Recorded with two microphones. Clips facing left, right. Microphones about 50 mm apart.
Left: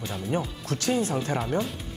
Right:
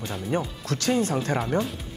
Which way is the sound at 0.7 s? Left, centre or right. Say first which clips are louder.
Right 2 dB; right.